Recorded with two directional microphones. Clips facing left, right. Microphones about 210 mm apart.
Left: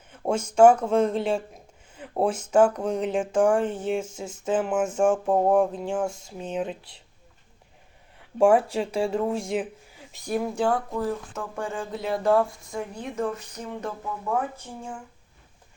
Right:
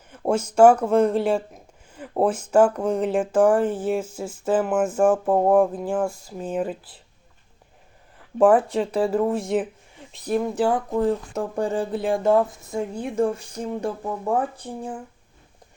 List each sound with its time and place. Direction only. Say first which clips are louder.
0.1 s a sound: right 4 dB; 10° right (ahead or behind)
0.5 s speech: right 2 dB; 5° right (ahead or behind)
6.1 s speech: right 1 dB; 25° left (ahead or behind)
6.4 s speech: right 3 dB; 5° right (ahead or behind)
8.4 s speech: right 2 dB; centre (ahead or behind)
10.6 s speech: right 1 dB; 15° right (ahead or behind)
10.9 s speech: right 6 dB; 30° right (ahead or behind)